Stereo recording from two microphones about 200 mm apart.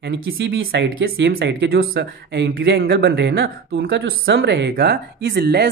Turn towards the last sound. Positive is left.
turn(degrees=-55)  # may be behind; listen again after turning